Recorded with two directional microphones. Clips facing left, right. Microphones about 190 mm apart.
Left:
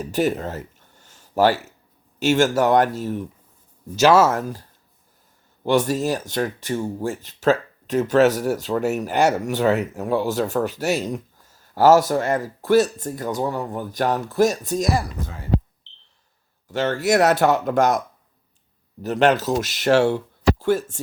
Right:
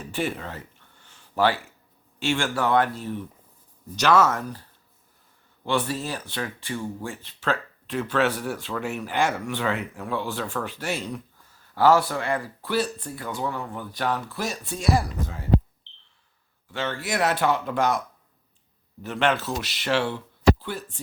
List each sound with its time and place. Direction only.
0.0 s a sound: 40° left (ahead or behind)
2.1 s speech: 40° left (ahead or behind)
3.9 s speech: 5° left (ahead or behind)
4.4 s speech: 45° left (ahead or behind)
5.6 s speech: 40° left (ahead or behind)
16.7 s speech: 45° left (ahead or behind)
19.0 s speech: 40° left (ahead or behind)